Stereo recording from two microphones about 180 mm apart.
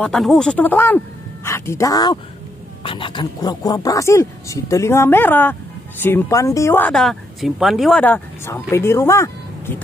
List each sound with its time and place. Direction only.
0.0 s a woman's voice: 5° left (ahead or behind)